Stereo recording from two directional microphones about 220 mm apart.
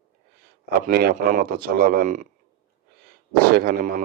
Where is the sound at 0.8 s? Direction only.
40° right (ahead or behind).